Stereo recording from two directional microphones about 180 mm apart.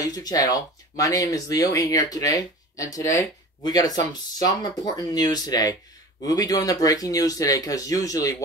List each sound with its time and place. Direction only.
0.0 s speech: 20° left (ahead or behind)